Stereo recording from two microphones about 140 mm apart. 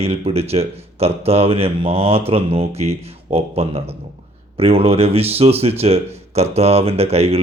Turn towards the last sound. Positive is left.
turn(degrees=-45)  # may be behind; listen again after turning